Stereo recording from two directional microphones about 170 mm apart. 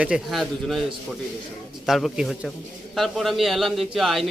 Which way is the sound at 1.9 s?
Centre (ahead or behind).